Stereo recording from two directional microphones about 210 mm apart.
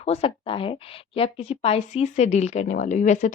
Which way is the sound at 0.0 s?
30° left (ahead or behind).